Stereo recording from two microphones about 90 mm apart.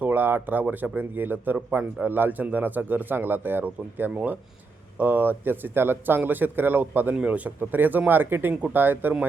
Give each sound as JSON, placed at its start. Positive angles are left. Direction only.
{"t": 0.0, "sound": "speech", "side_deg": -20}